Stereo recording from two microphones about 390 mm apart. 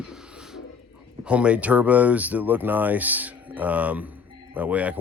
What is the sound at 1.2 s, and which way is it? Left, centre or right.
Speech, centre.